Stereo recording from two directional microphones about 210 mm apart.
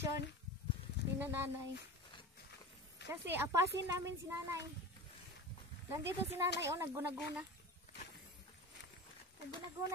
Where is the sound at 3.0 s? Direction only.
55° left (ahead or behind).